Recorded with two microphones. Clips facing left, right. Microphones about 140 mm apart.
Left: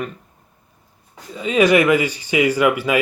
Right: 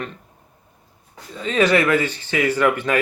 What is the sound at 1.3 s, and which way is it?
Speech, 10° left (ahead or behind).